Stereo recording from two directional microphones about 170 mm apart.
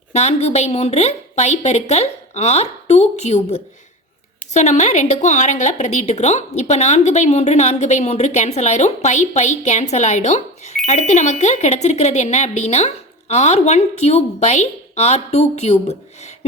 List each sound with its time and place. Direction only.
0.1 s a woman's voice: 40° left (ahead or behind)